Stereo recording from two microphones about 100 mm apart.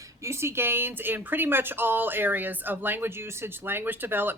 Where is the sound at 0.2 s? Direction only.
25° right (ahead or behind).